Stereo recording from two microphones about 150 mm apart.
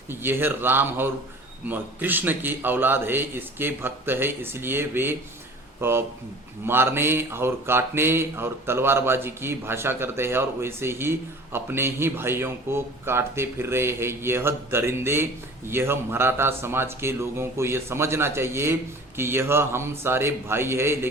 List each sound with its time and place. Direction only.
0.1 s speech: 15° right (ahead or behind)